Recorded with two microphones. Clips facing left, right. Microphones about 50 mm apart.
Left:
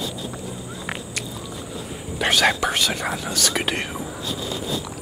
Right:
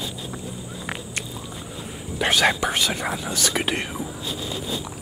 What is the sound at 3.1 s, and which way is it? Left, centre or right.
Speech, centre.